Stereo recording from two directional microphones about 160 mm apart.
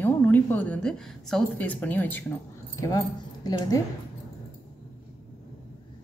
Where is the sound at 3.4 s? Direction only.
25° left (ahead or behind).